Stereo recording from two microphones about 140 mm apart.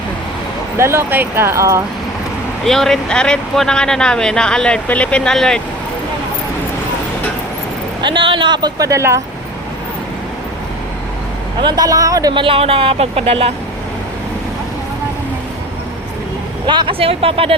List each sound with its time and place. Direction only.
0.8 s speech: 15° right (ahead or behind)
2.6 s speech: 5° left (ahead or behind)
8.0 s speech: 35° right (ahead or behind); by 9.2 s 20° right (ahead or behind)
11.6 s speech: 25° right (ahead or behind); by 13.5 s 45° right (ahead or behind)
16.6 s speech: 35° right (ahead or behind)